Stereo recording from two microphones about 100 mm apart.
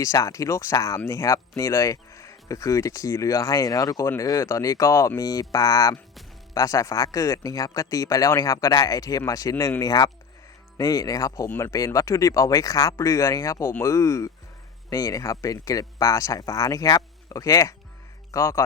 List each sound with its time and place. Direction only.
0.0 s speech: 35° left (ahead or behind)
11.4 s speech: 25° left (ahead or behind)